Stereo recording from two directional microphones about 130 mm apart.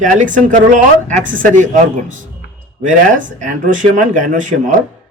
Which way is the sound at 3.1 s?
80° right.